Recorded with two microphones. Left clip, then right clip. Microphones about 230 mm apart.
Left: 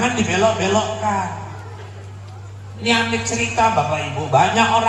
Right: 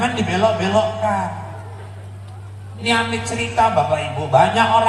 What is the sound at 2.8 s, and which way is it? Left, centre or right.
Speech, right.